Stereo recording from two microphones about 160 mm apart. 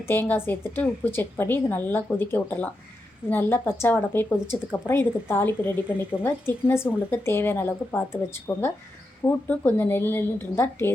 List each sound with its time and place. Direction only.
0.0 s a woman's voice: 15° left (ahead or behind)